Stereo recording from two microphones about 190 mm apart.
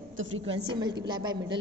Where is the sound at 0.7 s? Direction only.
25° right (ahead or behind).